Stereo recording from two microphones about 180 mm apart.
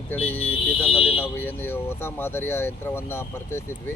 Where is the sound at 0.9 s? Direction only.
30° left (ahead or behind).